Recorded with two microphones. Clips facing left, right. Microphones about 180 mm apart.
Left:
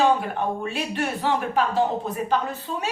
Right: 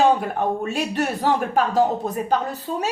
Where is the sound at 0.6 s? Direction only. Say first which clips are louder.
Right 3 dB; 45° right (ahead or behind).